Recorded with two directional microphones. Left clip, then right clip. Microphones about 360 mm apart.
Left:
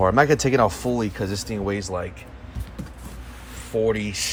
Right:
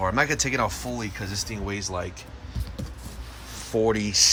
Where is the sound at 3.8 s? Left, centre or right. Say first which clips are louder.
Right 3 dB; centre.